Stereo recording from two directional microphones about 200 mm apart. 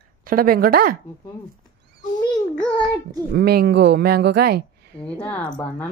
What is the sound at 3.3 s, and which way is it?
Speech, 55° right (ahead or behind).